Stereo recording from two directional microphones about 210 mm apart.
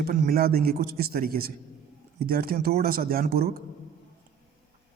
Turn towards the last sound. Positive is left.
turn(degrees=-45)  # may be behind; listen again after turning